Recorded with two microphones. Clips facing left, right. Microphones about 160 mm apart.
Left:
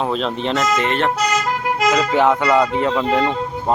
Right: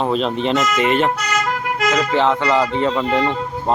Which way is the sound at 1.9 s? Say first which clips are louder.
Left 1 dB; 10° left (ahead or behind).